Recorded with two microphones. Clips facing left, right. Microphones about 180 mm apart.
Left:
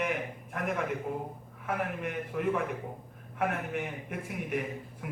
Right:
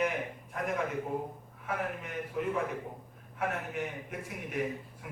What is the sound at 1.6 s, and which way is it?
A man's voice, 60° left (ahead or behind).